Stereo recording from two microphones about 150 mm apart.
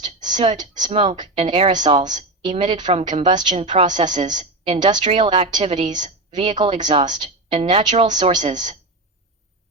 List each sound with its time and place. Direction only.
0.8 s a woman's voice: 35° right (ahead or behind)